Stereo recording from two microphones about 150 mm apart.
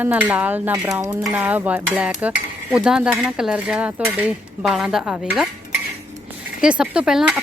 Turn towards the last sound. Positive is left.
turn(degrees=-5)  # may be behind; listen again after turning